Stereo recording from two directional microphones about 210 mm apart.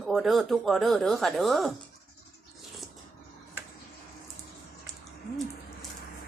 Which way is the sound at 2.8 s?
15° left (ahead or behind).